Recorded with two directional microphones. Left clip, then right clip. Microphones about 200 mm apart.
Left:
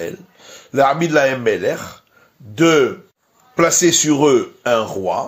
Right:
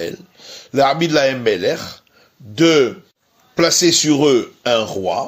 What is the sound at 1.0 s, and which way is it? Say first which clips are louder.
Speech: even; 40° right (ahead or behind).